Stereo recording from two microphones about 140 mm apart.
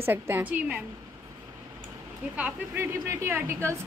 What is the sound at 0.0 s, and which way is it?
Speech, 15° right (ahead or behind).